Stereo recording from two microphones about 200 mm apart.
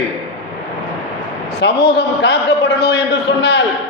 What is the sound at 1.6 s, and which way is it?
A man's voice, 60° left (ahead or behind).